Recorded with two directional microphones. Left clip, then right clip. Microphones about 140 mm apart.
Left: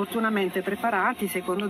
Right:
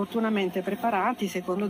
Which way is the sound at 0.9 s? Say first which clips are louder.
Left 2 dB; 15° right (ahead or behind).